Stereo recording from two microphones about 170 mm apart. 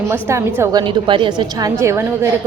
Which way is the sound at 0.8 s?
30° right (ahead or behind).